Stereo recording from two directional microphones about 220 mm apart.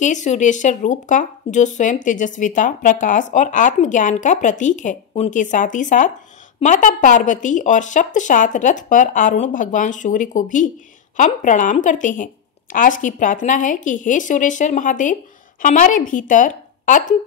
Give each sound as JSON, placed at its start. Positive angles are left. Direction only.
{"t": 0.0, "sound": "speech", "side_deg": 35}